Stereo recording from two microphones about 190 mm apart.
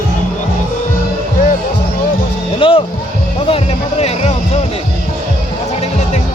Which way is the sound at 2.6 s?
30° left (ahead or behind).